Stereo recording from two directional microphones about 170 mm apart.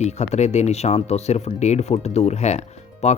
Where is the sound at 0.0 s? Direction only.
40° left (ahead or behind).